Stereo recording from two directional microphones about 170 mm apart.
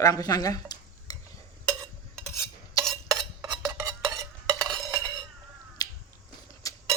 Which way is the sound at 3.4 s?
15° right (ahead or behind).